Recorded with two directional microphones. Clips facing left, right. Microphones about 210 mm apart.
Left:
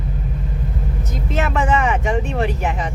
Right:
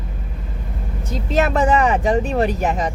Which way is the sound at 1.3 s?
40° right (ahead or behind).